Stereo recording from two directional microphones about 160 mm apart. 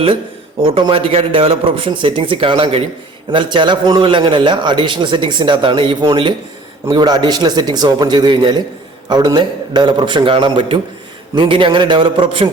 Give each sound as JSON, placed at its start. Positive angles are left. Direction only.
{"t": 0.6, "sound": "a man's voice", "side_deg": -30}